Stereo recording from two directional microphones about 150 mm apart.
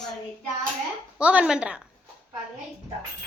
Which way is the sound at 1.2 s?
10° right (ahead or behind).